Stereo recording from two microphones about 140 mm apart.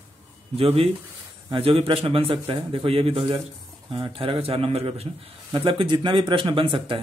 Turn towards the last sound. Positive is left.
turn(degrees=-40)  # may be behind; listen again after turning